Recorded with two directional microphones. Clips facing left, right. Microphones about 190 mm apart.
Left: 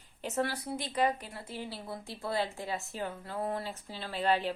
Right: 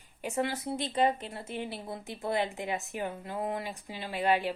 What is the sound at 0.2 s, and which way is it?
A woman's voice, 15° right (ahead or behind).